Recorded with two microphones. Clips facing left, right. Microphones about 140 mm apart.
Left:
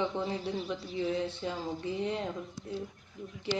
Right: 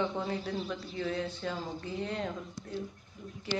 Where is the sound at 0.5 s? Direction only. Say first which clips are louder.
Left 2 dB; 10° left (ahead or behind).